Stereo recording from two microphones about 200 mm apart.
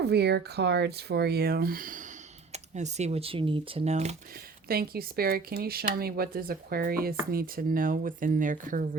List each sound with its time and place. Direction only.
0.0 s speech: 55° right (ahead or behind); by 4.1 s 35° right (ahead or behind)
4.7 s speech: 50° right (ahead or behind)